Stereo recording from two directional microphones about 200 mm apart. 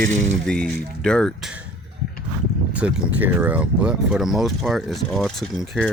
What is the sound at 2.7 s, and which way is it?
Speech, 5° right (ahead or behind).